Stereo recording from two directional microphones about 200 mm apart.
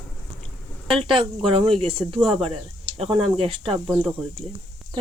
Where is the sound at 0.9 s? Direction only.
25° right (ahead or behind).